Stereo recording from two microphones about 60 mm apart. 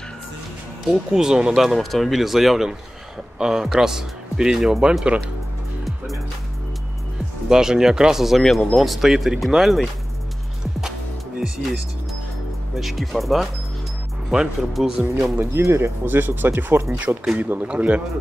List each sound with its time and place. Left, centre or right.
1.1 s speech: centre
7.4 s speech: centre
11.3 s speech: centre
14.3 s speech: centre
15.3 s speech: right